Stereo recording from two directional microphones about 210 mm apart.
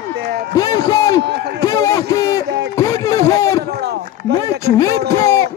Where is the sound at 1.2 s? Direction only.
50° right (ahead or behind).